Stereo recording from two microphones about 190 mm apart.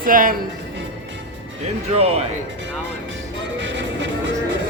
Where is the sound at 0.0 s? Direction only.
45° right (ahead or behind).